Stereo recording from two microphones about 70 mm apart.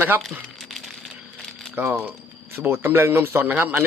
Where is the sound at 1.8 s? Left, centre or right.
Right.